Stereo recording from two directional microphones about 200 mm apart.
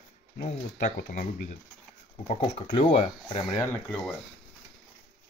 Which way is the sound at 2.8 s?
30° left (ahead or behind).